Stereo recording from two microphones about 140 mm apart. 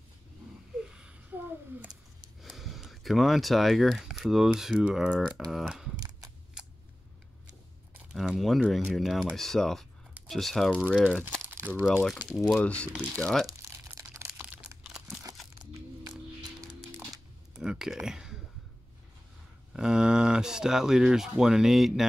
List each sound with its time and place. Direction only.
0.8 s a sound: 5° right (ahead or behind)
2.4 s speech: centre (ahead or behind)
5.9 s a sound: 25° right (ahead or behind)
6.6 s scissors: 5° right (ahead or behind)
7.9 s a sound: 5° right (ahead or behind)
8.6 s speech: centre (ahead or behind)
11.4 s crumpling: 15° right (ahead or behind)
12.2 s speech: 5° right (ahead or behind)
12.5 s speech: 10° left (ahead or behind)
13.5 s crumpling: 20° right (ahead or behind)
17.6 s a sound: 5° right (ahead or behind)
19.7 s speech: 5° right (ahead or behind)